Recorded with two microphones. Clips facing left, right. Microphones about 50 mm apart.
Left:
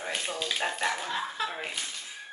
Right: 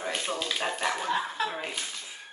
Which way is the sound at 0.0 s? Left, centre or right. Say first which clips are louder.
Right 2 dB; centre.